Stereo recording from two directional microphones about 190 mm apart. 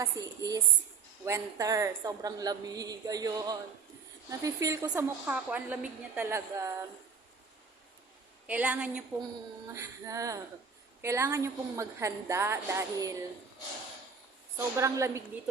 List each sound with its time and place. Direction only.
0.0 s a woman's voice: 20° right (ahead or behind)
8.4 s a woman's voice: 5° right (ahead or behind)
9.6 s a woman's voice: 15° right (ahead or behind)
14.8 s a woman's voice: 15° right (ahead or behind)